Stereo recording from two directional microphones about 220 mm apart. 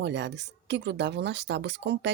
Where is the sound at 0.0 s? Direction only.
50° right (ahead or behind).